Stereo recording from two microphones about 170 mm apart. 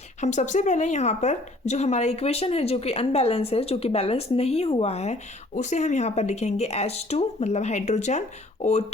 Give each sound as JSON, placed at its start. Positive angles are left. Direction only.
{"t": 0.2, "sound": "a woman's voice", "side_deg": 45}